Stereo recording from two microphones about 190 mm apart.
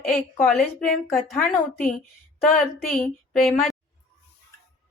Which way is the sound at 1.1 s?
5° left (ahead or behind).